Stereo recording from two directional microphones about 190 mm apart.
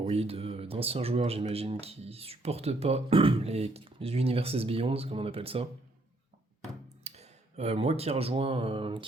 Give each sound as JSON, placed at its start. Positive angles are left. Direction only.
{"t": 0.0, "sound": "speech", "side_deg": -30}
{"t": 7.0, "sound": "speech", "side_deg": -35}